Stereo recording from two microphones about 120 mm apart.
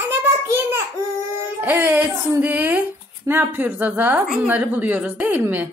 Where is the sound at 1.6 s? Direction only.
15° right (ahead or behind).